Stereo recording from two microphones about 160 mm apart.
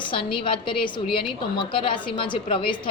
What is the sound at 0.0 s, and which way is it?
A woman's voice, 30° left (ahead or behind).